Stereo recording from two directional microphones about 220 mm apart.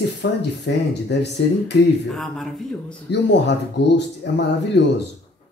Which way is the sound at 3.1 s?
50° left (ahead or behind).